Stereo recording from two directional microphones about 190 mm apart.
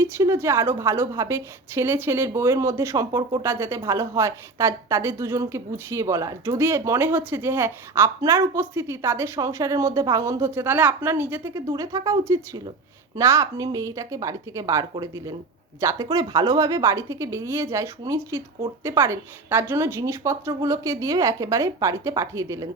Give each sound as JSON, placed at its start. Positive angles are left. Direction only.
{"t": 0.0, "sound": "a woman's voice", "side_deg": -15}
{"t": 13.1, "sound": "a woman's voice", "side_deg": -15}